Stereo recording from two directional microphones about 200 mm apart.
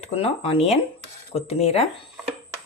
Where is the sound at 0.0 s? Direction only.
30° left (ahead or behind).